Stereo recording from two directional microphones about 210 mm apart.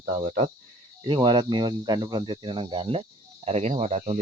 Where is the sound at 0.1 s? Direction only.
30° right (ahead or behind).